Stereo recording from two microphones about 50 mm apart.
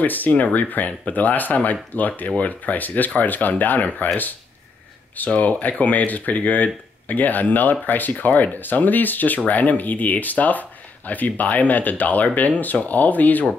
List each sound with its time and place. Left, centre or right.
0.0 s speech: left
5.1 s speech: left